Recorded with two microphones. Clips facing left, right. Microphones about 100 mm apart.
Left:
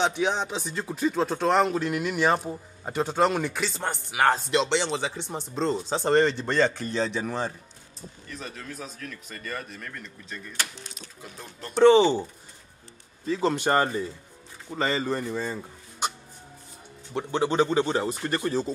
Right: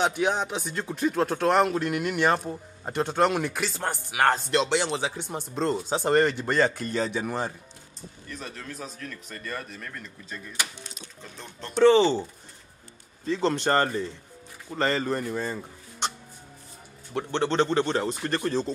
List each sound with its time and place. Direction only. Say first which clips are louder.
0.0 s speech: even; 5° right (ahead or behind)
11.8 s speech: left 1 dB; 15° left (ahead or behind)
13.3 s speech: even; 5° left (ahead or behind)
17.1 s speech: left 1 dB; 5° left (ahead or behind)